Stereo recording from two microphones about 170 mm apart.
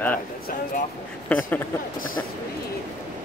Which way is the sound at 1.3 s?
10° left (ahead or behind).